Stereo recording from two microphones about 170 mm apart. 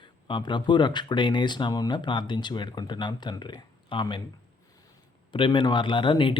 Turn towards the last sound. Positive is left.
turn(degrees=30)  # may be behind; listen again after turning